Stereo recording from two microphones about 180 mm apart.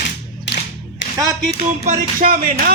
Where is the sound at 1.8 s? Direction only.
45° right (ahead or behind).